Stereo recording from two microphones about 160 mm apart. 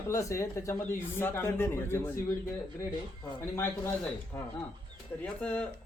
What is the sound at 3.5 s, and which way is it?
A man's voice, 15° left (ahead or behind).